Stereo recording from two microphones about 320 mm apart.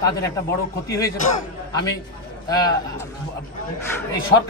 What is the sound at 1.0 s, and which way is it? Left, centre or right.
Speech, left.